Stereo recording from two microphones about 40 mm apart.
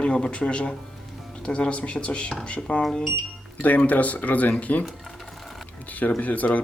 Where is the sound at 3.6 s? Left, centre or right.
Left.